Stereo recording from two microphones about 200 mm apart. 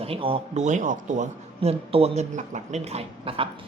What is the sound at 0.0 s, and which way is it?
Speech, 30° right (ahead or behind).